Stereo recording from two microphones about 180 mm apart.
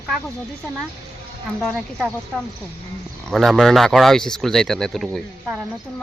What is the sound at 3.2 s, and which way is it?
Speech, centre (ahead or behind).